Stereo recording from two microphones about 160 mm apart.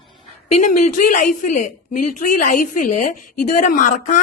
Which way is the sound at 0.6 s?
50° left (ahead or behind).